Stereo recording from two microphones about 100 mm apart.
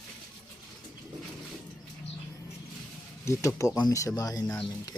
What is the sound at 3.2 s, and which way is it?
Speech, 30° left (ahead or behind).